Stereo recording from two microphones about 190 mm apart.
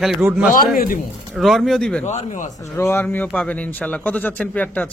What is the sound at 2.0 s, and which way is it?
Speech, 40° left (ahead or behind).